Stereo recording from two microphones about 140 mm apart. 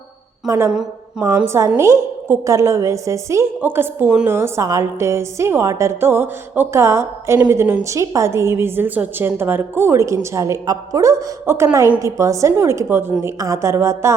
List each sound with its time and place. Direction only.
0.4 s a woman's voice: 25° right (ahead or behind)